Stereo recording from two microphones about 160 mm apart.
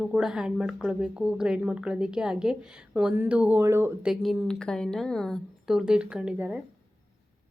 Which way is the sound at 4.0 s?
5° right (ahead or behind).